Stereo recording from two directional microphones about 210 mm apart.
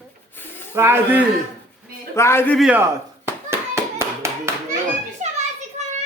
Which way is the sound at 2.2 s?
10° left (ahead or behind).